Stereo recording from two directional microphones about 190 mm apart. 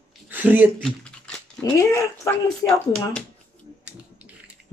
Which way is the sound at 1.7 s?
15° left (ahead or behind).